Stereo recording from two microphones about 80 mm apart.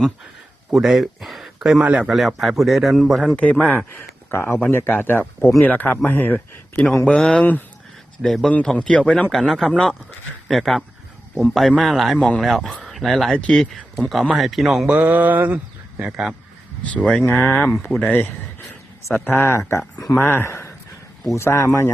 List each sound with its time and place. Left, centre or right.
0.7 s a man's voice: centre
2.1 s speech: centre
3.3 s a man's voice: centre
4.3 s speech: left
8.2 s a man's voice: centre
14.8 s speech: right
16.9 s a man's voice: centre
19.3 s speech: left